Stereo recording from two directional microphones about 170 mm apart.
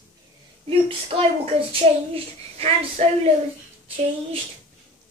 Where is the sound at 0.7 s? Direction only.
35° right (ahead or behind).